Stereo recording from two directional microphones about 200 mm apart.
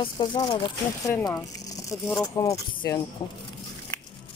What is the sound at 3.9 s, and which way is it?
Biting, 15° left (ahead or behind).